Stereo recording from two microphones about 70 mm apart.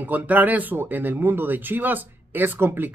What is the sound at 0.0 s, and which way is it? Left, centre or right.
Speech, right.